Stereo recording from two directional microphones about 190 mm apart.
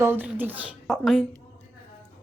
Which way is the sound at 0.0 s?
10° right (ahead or behind).